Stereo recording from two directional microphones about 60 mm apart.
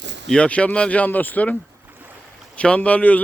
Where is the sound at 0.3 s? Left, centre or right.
Centre.